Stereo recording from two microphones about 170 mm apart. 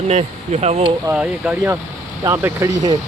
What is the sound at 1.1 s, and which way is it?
Speech, 5° right (ahead or behind).